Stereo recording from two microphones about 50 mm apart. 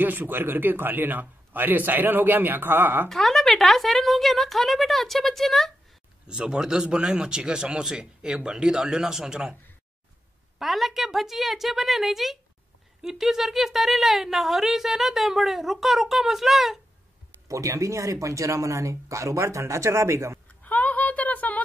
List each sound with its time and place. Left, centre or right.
0.0 s a man's voice: right
3.1 s a woman's voice: centre
6.2 s a man's voice: centre
10.6 s a woman's voice: centre
17.5 s speech: right
20.6 s a sound: left